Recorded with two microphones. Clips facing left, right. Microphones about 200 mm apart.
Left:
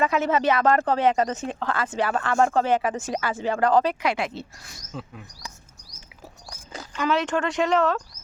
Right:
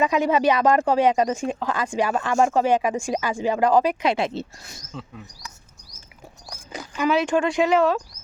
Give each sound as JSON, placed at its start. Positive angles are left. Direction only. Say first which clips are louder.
{"t": 0.0, "sound": "speech", "louder": "right 2 dB", "side_deg": -15}
{"t": 4.0, "sound": "speech", "louder": "right 3 dB", "side_deg": -25}
{"t": 4.9, "sound": "speech", "louder": "left 1 dB", "side_deg": 5}
{"t": 6.7, "sound": "speech", "louder": "right 3 dB", "side_deg": -10}